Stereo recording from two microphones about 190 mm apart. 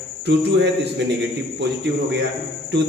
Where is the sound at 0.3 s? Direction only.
65° right (ahead or behind).